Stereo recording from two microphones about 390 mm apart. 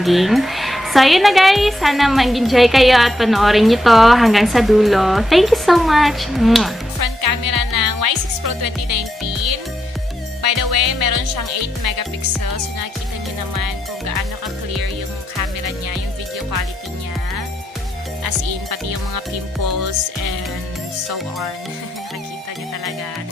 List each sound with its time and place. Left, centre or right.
0.0 s a woman's voice: centre
7.0 s music: right
10.4 s speech: right
13.6 s music: right
18.2 s music: right